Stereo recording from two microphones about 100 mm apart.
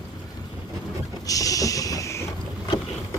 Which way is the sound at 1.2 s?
35° left (ahead or behind).